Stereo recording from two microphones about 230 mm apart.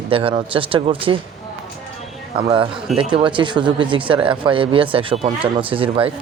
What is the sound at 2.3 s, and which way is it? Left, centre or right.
Speech, right.